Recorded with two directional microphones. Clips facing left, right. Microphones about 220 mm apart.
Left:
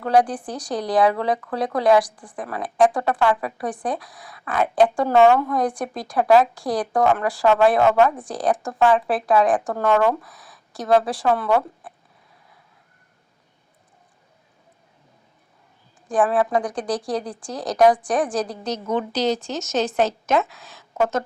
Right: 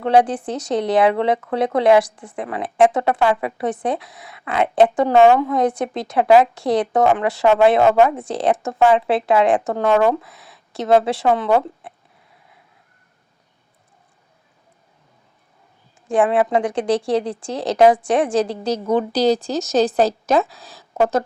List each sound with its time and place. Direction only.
0.0 s speech: 25° right (ahead or behind)
16.0 s speech: 25° right (ahead or behind)